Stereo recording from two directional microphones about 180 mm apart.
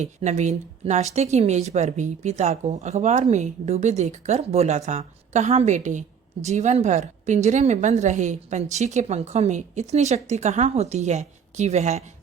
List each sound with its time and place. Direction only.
0.0 s a woman's voice: 40° right (ahead or behind)